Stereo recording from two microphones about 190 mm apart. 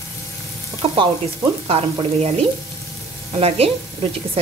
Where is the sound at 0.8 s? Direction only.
30° right (ahead or behind).